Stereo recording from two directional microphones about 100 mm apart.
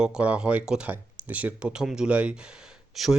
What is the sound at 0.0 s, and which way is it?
Speech, 10° right (ahead or behind).